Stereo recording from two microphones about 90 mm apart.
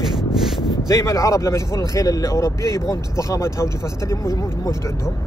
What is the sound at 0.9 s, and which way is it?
A man's voice, 40° left (ahead or behind).